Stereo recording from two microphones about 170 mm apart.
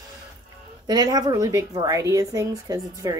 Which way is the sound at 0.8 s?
25° right (ahead or behind).